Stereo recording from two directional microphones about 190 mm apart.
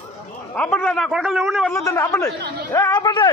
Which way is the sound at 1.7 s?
15° left (ahead or behind).